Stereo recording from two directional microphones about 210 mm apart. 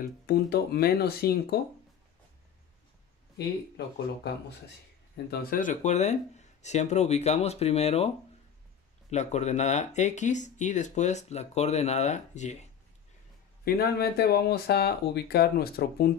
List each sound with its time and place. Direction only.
0.0 s speech: 50° left (ahead or behind)
3.3 s speech: 50° left (ahead or behind); by 8.1 s 30° left (ahead or behind)
9.1 s speech: 35° left (ahead or behind)
13.7 s speech: 50° left (ahead or behind)